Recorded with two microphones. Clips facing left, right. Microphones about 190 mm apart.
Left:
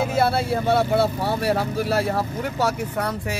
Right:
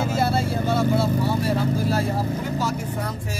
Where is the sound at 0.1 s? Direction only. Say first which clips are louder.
Left 2 dB; 65° left (ahead or behind).